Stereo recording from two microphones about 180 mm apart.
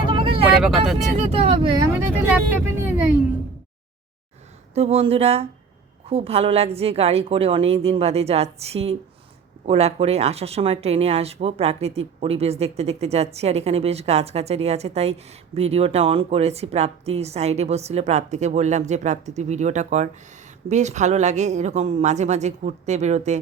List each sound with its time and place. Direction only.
0.0 s vehicle: 30° right (ahead or behind)
0.6 s speech: centre (ahead or behind)
1.1 s speech: 35° right (ahead or behind)
4.7 s speech: 35° right (ahead or behind)